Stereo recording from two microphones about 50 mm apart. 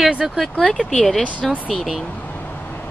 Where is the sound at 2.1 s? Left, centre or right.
Left.